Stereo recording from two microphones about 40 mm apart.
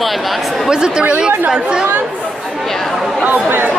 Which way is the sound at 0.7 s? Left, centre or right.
Centre.